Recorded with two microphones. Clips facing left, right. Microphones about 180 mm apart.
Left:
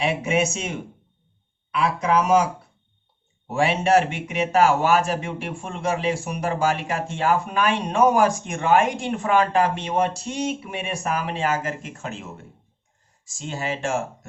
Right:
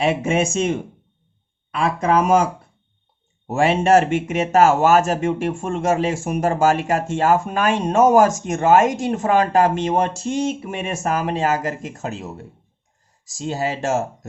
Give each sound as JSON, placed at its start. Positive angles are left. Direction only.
{"t": 0.0, "sound": "speech", "side_deg": -50}